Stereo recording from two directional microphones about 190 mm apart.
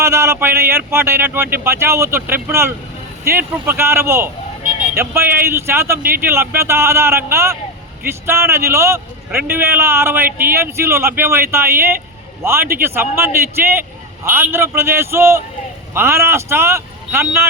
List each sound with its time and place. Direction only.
0.0 s a man's voice: 15° right (ahead or behind)